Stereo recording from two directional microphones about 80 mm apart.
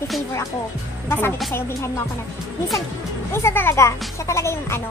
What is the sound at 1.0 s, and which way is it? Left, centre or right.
Speech, left.